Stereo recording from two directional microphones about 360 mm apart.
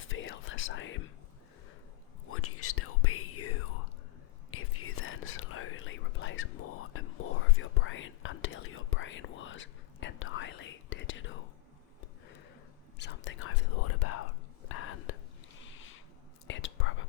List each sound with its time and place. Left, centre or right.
0.0 s whispering: left
2.3 s whispering: left
4.5 s whispering: left
13.0 s whispering: left
15.6 s a sound: left
16.5 s whispering: left